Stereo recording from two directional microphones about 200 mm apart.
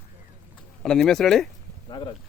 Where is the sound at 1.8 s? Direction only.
20° left (ahead or behind).